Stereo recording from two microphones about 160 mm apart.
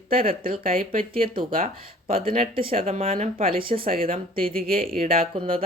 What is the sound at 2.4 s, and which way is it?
Speech, 35° right (ahead or behind).